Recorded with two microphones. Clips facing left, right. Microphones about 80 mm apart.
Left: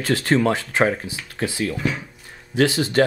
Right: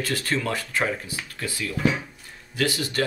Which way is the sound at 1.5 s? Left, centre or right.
Left.